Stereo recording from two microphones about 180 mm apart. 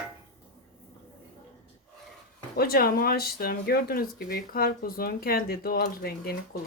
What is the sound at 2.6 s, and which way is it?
Speech, 55° left (ahead or behind).